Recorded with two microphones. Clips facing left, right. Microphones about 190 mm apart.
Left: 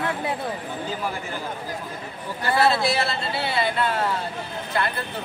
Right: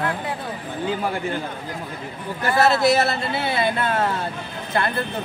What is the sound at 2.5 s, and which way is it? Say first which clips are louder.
Speech: right 4 dB; 45° right (ahead or behind).